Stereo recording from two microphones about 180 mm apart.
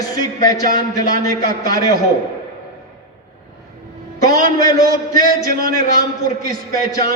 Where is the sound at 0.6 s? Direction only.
50° right (ahead or behind).